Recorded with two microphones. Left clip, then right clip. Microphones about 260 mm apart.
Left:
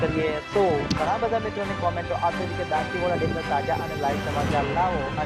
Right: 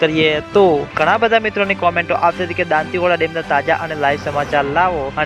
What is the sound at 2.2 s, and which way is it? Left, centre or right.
Speech, right.